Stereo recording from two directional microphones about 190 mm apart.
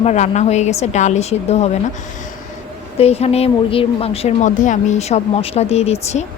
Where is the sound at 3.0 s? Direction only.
30° left (ahead or behind).